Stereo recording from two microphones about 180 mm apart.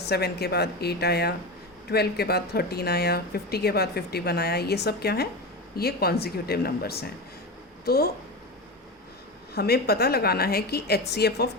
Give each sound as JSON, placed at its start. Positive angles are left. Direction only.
{"t": 0.0, "sound": "speech", "side_deg": 65}
{"t": 9.6, "sound": "speech", "side_deg": 60}